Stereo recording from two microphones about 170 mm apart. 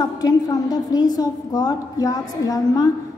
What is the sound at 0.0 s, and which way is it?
A woman's voice, 25° left (ahead or behind).